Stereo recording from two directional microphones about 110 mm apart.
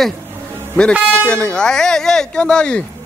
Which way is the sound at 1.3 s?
10° left (ahead or behind).